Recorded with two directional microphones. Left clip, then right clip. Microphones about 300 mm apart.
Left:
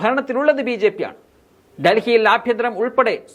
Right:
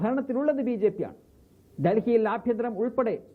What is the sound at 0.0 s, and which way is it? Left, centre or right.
Speech, centre.